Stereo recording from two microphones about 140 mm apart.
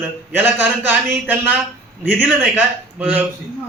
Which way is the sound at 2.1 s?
15° right (ahead or behind).